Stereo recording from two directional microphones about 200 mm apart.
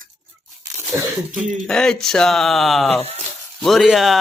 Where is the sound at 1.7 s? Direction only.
5° left (ahead or behind).